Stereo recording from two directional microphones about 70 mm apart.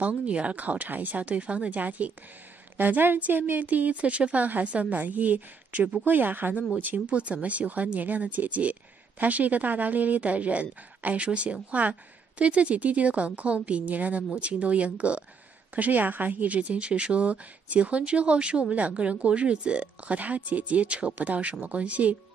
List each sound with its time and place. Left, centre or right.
0.0 s a woman's voice: centre